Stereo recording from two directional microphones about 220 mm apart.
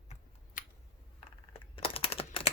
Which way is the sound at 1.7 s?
25° left (ahead or behind).